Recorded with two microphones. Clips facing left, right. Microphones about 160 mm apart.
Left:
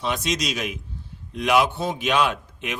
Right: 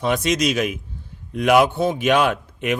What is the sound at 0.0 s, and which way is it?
A man's voice, 50° right (ahead or behind).